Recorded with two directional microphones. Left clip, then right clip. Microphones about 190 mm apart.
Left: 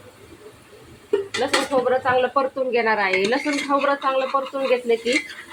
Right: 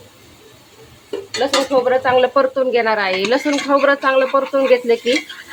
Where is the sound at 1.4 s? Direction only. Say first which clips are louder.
Right 8 dB; 40° right (ahead or behind).